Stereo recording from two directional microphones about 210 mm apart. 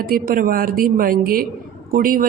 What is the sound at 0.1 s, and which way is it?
Speech, 45° right (ahead or behind).